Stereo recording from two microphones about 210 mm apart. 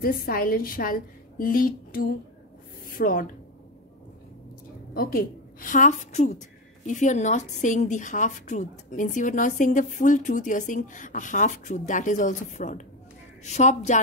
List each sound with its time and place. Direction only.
0.0 s a woman's voice: 45° left (ahead or behind)
4.9 s a woman's voice: 40° left (ahead or behind)